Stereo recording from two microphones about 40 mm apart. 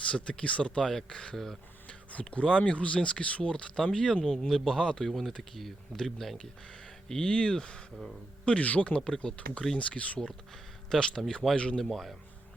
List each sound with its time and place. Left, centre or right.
0.1 s speech: left
0.8 s speech: centre
1.1 s speech: left
5.0 s speech: centre
7.1 s speech: centre
8.4 s speech: left
9.0 s speech: left
9.7 s speech: left
10.8 s speech: centre
11.5 s speech: left
11.8 s speech: centre